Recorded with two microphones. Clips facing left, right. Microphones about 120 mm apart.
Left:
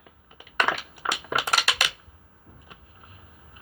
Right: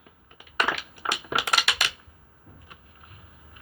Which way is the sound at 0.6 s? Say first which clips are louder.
Left 2 dB; 10° right (ahead or behind).